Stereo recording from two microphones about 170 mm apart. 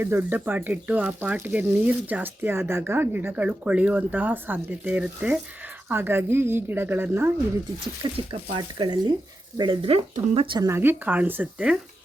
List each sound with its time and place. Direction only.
0.0 s speech: 10° right (ahead or behind)
8.0 s speech: 30° right (ahead or behind)
10.7 s speech: 15° right (ahead or behind)